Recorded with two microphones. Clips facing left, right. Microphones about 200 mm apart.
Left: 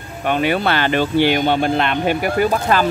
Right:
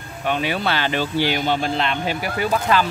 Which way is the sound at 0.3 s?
55° left (ahead or behind).